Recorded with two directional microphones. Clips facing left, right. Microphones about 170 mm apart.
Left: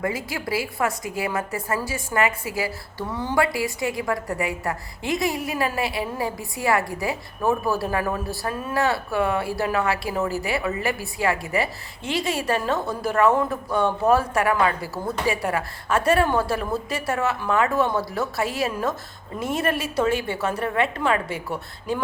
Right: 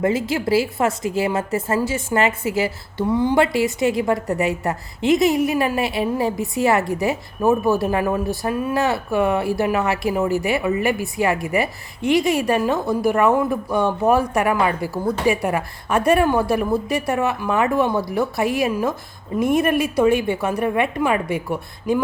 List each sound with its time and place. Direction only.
0.0 s a woman's voice: 25° right (ahead or behind)